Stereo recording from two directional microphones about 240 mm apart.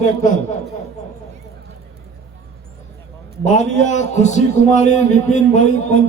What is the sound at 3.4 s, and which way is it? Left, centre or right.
A man's voice, left.